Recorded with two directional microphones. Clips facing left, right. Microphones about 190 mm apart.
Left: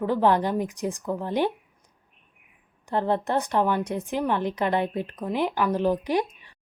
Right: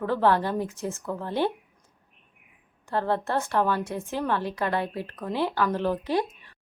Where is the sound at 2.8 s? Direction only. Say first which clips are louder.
Left 2 dB; 20° left (ahead or behind).